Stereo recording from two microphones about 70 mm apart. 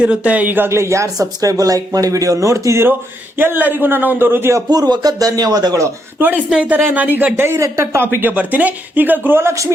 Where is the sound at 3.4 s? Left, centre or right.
Right.